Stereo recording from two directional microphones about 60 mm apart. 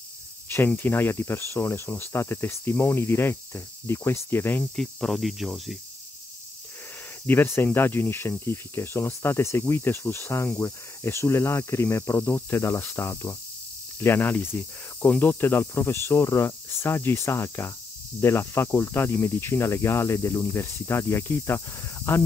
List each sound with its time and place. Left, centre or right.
0.7 s speech: left
4.7 s speech: centre
7.2 s speech: left
8.3 s cricket: left
13.9 s speech: left
14.6 s cricket: left